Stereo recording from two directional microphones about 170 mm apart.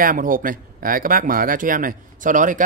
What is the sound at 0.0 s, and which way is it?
Speech, 55° right (ahead or behind).